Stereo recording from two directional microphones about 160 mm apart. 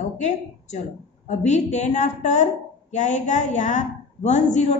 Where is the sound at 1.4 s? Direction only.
45° left (ahead or behind).